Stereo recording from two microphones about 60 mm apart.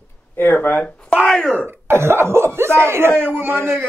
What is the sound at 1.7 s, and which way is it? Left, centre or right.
A man's voice, right.